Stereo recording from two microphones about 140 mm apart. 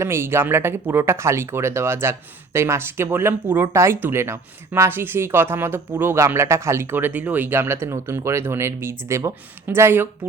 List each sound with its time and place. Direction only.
0.0 s speech: 20° right (ahead or behind)